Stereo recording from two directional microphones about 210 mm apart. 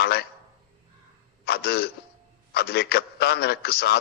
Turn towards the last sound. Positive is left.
turn(degrees=50)  # may be behind; listen again after turning